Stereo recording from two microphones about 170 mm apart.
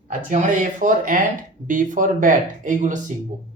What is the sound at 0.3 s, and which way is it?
Speech, 50° right (ahead or behind).